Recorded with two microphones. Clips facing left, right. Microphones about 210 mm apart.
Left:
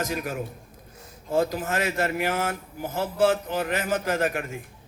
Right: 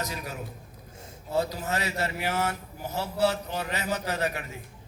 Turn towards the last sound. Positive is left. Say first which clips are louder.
# left 5 dB
turn(degrees=50)  # may be behind; listen again after turning